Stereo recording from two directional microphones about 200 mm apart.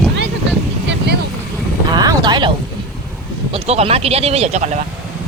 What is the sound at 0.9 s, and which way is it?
Vehicle, 55° right (ahead or behind).